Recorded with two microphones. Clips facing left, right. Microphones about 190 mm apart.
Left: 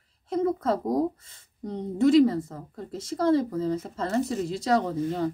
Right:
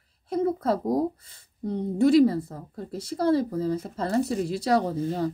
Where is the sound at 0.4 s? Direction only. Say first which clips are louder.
Even; 30° right (ahead or behind).